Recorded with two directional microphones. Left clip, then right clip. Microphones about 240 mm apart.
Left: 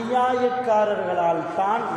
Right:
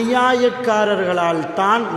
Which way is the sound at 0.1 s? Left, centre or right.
Right.